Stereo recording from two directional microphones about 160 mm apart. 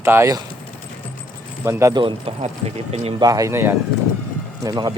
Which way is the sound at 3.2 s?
20° right (ahead or behind).